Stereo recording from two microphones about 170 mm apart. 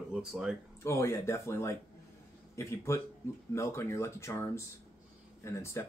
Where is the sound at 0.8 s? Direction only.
15° left (ahead or behind).